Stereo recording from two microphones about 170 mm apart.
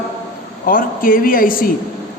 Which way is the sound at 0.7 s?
55° left (ahead or behind).